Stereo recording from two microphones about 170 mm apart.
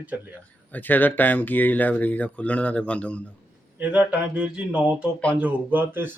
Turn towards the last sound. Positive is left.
turn(degrees=-10)  # may be behind; listen again after turning